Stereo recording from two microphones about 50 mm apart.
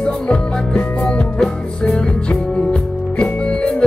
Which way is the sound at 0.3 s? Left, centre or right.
Left.